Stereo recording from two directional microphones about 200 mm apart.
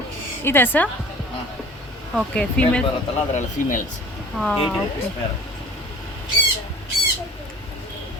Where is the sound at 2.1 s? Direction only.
5° left (ahead or behind).